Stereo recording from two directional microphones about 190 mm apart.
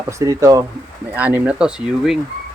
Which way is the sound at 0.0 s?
15° right (ahead or behind).